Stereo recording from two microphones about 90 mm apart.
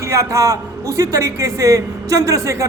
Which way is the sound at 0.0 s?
35° right (ahead or behind).